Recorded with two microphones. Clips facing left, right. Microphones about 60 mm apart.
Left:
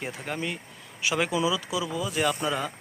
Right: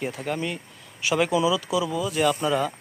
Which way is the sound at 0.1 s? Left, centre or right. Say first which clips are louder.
Right 4 dB; centre.